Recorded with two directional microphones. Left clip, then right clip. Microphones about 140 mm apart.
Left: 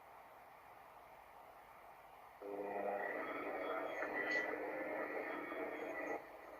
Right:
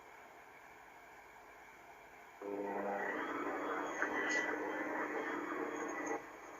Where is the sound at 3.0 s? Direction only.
30° right (ahead or behind).